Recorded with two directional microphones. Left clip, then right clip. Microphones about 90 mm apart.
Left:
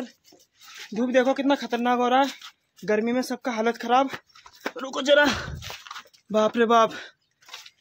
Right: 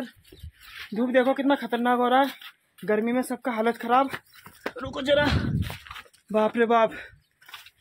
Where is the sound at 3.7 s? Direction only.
25° left (ahead or behind).